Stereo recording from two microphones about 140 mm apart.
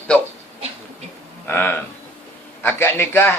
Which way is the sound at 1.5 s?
15° left (ahead or behind).